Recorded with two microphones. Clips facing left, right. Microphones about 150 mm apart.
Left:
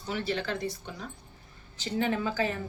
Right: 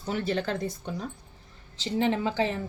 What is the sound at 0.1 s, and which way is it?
Speech, 45° right (ahead or behind).